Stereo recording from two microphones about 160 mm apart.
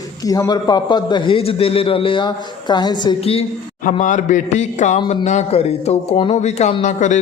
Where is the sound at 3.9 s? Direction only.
55° left (ahead or behind).